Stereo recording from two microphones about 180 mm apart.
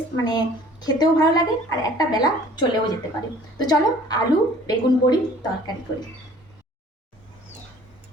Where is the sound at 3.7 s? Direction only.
20° left (ahead or behind).